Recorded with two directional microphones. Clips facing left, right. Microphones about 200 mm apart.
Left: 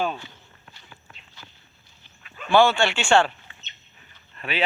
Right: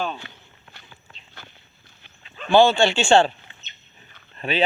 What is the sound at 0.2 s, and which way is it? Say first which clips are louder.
Speech: right 2 dB; 65° right (ahead or behind).